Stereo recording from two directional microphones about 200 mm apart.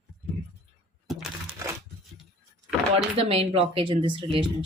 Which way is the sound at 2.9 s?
30° right (ahead or behind).